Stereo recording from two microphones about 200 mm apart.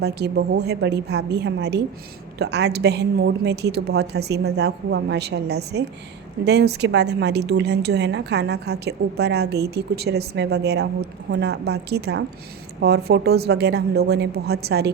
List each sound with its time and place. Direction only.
0.0 s a woman's voice: 55° right (ahead or behind)